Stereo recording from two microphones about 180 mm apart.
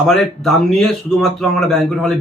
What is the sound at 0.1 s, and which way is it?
A man's voice, centre (ahead or behind).